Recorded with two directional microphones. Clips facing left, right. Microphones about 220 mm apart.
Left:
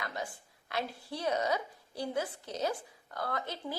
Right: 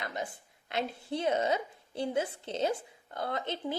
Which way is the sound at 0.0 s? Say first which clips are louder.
Right 2 dB; 20° right (ahead or behind).